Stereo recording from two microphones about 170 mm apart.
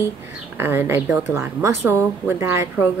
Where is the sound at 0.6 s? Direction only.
15° right (ahead or behind).